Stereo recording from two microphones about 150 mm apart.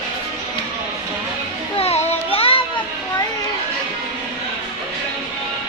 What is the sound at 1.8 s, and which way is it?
Music, 45° left (ahead or behind).